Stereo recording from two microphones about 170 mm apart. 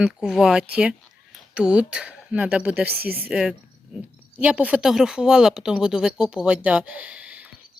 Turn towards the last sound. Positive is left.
turn(degrees=-5)  # may be behind; listen again after turning